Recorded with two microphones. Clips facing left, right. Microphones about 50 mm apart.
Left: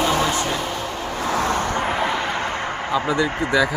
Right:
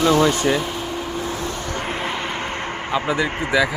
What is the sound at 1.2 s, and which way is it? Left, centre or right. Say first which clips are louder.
Vehicle: left 5 dB; left.